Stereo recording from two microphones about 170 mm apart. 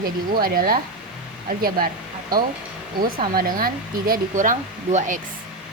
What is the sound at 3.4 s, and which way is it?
Speech, 55° right (ahead or behind).